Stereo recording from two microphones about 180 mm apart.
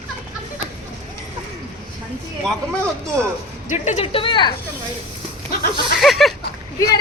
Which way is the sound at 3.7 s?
40° left (ahead or behind).